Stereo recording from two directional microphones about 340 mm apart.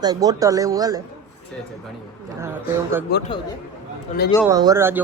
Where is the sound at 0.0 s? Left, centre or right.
Centre.